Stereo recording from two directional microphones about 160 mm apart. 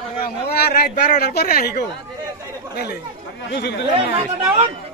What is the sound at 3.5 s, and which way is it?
Speech, 90° left.